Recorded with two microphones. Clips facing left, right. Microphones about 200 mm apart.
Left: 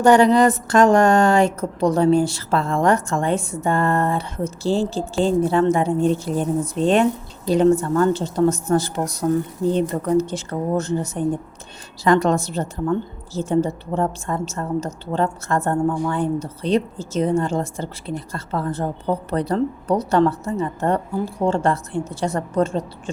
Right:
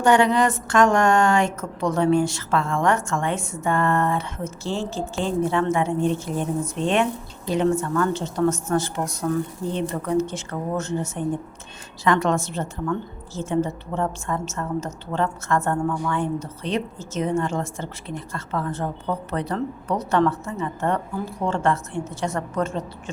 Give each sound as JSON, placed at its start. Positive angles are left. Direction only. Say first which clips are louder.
{"t": 0.0, "sound": "a woman's voice", "louder": "left 5 dB", "side_deg": 40}